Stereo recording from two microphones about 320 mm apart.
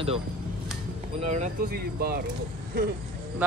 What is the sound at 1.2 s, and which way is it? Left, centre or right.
Speech, right.